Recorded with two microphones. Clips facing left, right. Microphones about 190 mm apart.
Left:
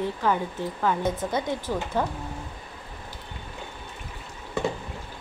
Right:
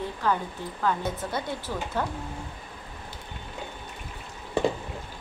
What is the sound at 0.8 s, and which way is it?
A woman's voice, 20° left (ahead or behind).